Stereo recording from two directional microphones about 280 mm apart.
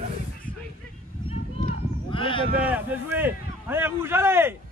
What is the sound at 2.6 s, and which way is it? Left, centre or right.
A man's voice, centre.